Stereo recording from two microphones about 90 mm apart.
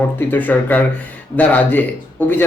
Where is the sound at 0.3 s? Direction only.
20° left (ahead or behind).